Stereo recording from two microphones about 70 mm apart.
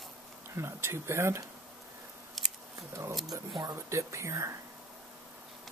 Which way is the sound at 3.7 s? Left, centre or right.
Right.